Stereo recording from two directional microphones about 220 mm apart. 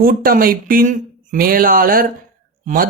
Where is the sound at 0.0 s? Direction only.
40° right (ahead or behind).